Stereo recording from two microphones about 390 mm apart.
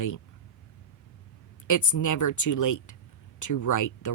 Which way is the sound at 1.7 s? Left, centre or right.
Left.